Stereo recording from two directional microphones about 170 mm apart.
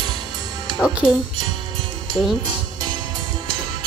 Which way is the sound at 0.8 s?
5° right (ahead or behind).